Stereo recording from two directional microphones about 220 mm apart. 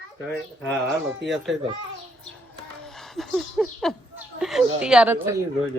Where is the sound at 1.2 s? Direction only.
Centre (ahead or behind).